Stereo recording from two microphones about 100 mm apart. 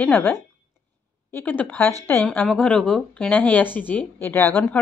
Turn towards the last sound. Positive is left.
turn(degrees=25)  # may be behind; listen again after turning